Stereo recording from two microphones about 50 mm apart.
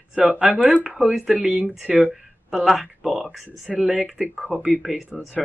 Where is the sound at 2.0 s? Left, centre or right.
Centre.